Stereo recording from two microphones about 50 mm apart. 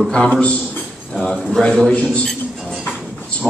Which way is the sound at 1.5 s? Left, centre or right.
Centre.